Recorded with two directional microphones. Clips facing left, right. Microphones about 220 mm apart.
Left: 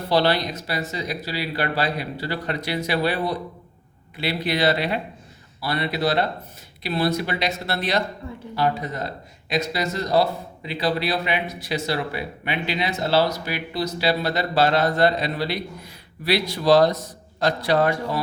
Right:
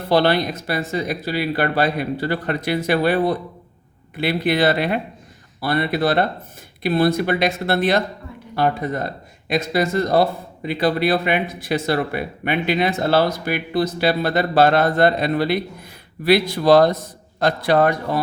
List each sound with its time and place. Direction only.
0.1 s speech: 55° right (ahead or behind)